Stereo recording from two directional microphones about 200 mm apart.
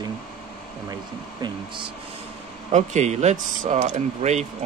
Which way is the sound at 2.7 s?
35° right (ahead or behind).